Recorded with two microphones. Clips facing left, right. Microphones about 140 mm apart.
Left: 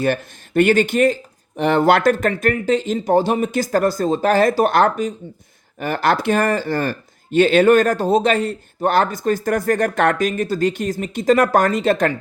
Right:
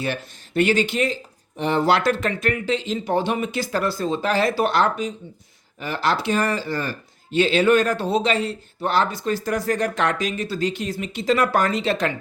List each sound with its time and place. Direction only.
0.0 s speech: 50° left (ahead or behind)
1.5 s speech: 65° left (ahead or behind); by 12.1 s 50° left (ahead or behind)